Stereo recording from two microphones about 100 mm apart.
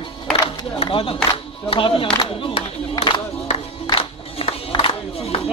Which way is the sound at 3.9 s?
70° left (ahead or behind).